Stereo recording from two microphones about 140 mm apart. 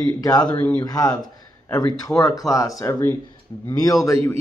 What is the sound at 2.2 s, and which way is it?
Speech, 25° left (ahead or behind).